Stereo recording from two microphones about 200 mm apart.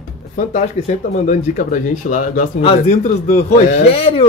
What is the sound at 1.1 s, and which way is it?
Speech, 40° left (ahead or behind).